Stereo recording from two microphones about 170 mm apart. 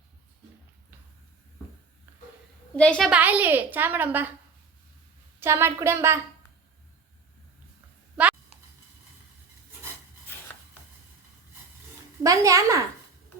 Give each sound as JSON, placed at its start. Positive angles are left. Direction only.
{"t": 2.7, "sound": "a woman's voice", "side_deg": 5}
{"t": 3.1, "sound": "a woman's voice", "side_deg": -10}
{"t": 5.4, "sound": "a woman's voice", "side_deg": -15}
{"t": 12.2, "sound": "a woman's voice", "side_deg": -20}